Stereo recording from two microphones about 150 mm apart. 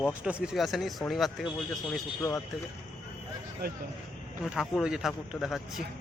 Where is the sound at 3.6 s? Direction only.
90° right.